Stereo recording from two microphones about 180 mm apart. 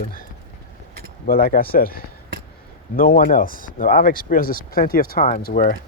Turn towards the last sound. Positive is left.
turn(degrees=50)  # may be behind; listen again after turning